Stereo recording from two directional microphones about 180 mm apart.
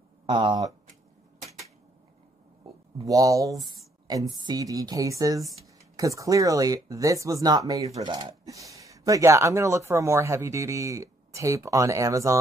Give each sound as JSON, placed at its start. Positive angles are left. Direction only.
{"t": 0.3, "sound": "speech", "side_deg": -25}
{"t": 3.1, "sound": "speech", "side_deg": -20}